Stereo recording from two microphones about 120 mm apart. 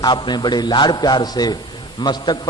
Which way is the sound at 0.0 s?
40° left (ahead or behind).